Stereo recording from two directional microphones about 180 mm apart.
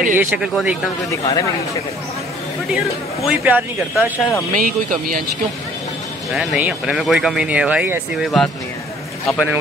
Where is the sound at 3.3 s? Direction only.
5° right (ahead or behind).